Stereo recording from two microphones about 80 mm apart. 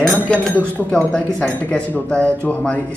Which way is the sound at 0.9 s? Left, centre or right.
Centre.